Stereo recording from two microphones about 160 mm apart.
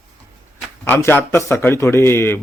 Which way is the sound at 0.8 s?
15° left (ahead or behind).